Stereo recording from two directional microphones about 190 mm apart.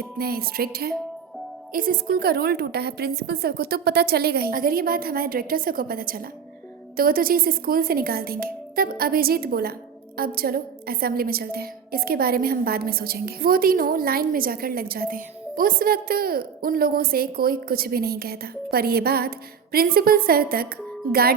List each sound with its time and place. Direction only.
0.2 s a woman's voice: 55° right (ahead or behind)